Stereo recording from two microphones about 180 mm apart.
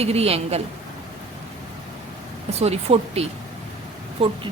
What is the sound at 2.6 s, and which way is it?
A woman's voice, 35° right (ahead or behind).